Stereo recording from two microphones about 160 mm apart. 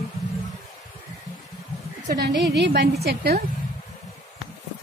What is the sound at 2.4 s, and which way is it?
A woman's voice, 90° right.